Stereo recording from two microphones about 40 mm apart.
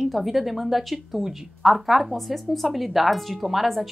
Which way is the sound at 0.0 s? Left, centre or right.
Centre.